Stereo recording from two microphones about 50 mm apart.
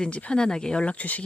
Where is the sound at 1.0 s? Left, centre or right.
Left.